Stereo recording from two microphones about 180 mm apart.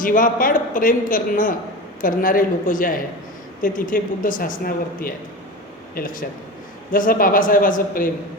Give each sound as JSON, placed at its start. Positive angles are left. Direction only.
{"t": 0.0, "sound": "a man's voice", "side_deg": 50}